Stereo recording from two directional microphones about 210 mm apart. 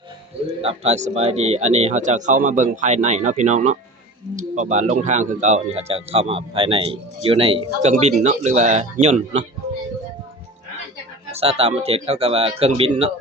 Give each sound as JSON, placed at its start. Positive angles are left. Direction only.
{"t": 0.6, "sound": "speech", "side_deg": -30}
{"t": 11.3, "sound": "speech", "side_deg": -30}